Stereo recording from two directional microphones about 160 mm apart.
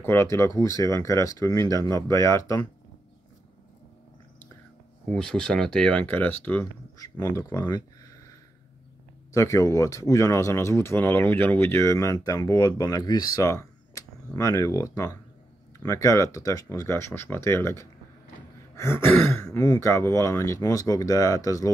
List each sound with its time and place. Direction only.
0.0 s speech: 15° left (ahead or behind)
5.1 s speech: 5° left (ahead or behind); by 8.3 s 20° left (ahead or behind)
9.3 s speech: 20° left (ahead or behind)